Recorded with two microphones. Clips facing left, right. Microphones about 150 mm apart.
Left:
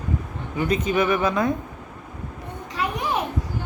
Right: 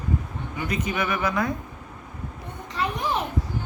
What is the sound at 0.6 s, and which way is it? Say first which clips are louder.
Speech: left 6 dB; 25° left (ahead or behind).